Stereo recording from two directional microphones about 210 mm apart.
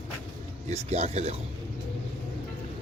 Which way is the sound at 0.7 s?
30° right (ahead or behind).